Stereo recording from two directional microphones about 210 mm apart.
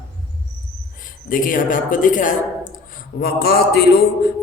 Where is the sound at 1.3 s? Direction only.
40° left (ahead or behind).